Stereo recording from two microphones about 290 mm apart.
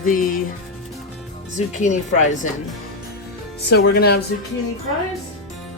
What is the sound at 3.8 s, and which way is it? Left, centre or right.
Speech, left.